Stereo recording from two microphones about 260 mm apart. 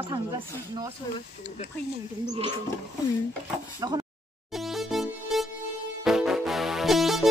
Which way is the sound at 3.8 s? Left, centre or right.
Centre.